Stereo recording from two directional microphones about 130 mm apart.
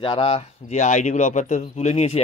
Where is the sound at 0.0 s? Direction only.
45° left (ahead or behind).